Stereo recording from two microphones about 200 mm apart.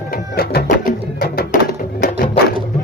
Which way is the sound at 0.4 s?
50° left (ahead or behind).